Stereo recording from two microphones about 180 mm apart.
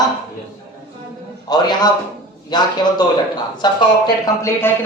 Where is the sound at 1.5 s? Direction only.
20° left (ahead or behind).